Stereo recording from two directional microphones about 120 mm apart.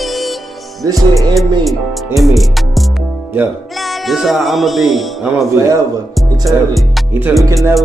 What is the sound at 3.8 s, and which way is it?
Music, centre (ahead or behind).